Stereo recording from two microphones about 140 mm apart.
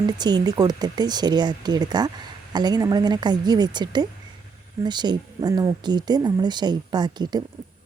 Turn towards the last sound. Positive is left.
turn(degrees=-30)  # may be behind; listen again after turning